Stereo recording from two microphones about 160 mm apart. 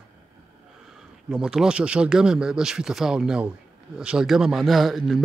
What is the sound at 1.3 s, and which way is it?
Speech, 5° right (ahead or behind).